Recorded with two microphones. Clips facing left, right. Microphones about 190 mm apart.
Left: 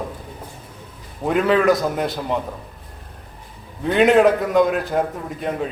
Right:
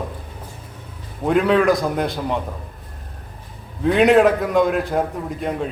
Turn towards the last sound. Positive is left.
turn(degrees=0)  # may be behind; listen again after turning